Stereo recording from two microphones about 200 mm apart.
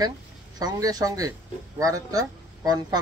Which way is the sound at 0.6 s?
20° right (ahead or behind).